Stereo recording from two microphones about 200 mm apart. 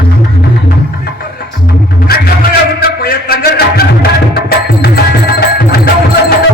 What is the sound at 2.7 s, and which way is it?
Music, 50° left (ahead or behind).